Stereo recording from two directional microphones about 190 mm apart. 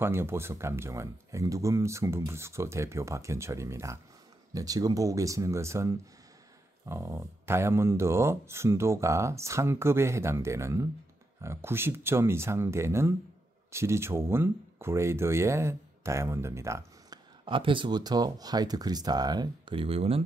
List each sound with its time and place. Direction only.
0.0 s speech: 10° right (ahead or behind)
17.5 s speech: 25° right (ahead or behind)